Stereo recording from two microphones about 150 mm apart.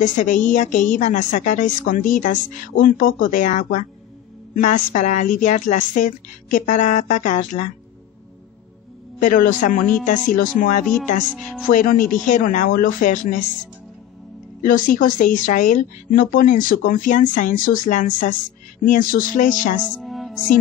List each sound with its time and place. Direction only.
0.0 s speech: 55° left (ahead or behind)
9.2 s speech: 60° left (ahead or behind)
14.6 s speech: 65° left (ahead or behind)
19.9 s music: centre (ahead or behind)